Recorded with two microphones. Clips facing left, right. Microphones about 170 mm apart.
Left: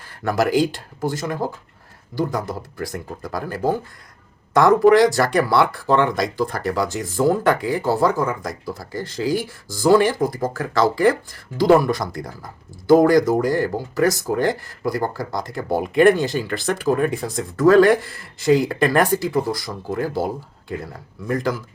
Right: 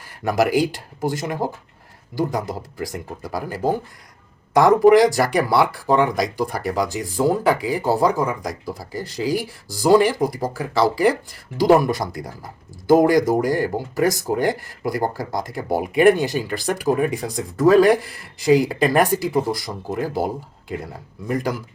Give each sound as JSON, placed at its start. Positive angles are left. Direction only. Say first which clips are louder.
{"t": 0.3, "sound": "speech", "louder": "even", "side_deg": -15}
{"t": 15.0, "sound": "speech", "louder": "right 1 dB", "side_deg": -45}
{"t": 15.4, "sound": "speech", "louder": "left 2 dB", "side_deg": -10}
{"t": 21.2, "sound": "speech", "louder": "left 1 dB", "side_deg": -15}